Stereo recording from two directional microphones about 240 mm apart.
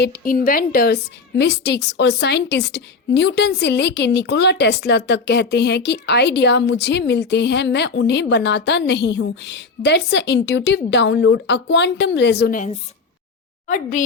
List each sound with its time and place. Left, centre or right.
0.0 s a woman's voice: left